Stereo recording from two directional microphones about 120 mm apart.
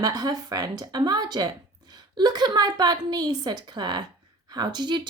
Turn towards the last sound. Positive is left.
turn(degrees=-40)  # may be behind; listen again after turning